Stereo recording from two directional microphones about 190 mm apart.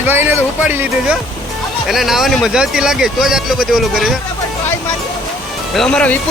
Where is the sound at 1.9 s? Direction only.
Centre (ahead or behind).